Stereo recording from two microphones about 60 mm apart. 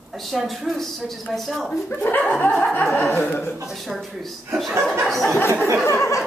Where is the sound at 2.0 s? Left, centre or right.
Left.